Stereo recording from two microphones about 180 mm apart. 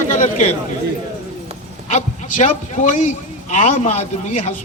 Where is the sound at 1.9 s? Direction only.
40° left (ahead or behind).